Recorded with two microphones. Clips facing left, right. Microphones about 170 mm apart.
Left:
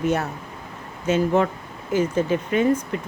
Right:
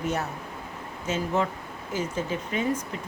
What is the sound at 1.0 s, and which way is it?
Speech, 65° left (ahead or behind).